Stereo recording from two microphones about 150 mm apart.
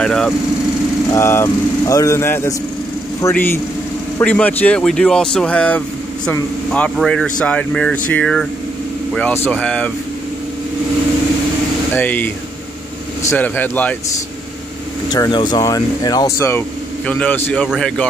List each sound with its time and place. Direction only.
0.0 s speech: 5° left (ahead or behind)
1.1 s speech: 15° left (ahead or behind)
11.9 s speech: 10° left (ahead or behind)
13.3 s speech: 10° left (ahead or behind)
15.0 s speech: 25° left (ahead or behind); by 18.0 s 5° left (ahead or behind)